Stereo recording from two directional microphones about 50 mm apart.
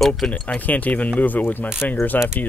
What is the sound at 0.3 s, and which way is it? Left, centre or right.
Speech, left.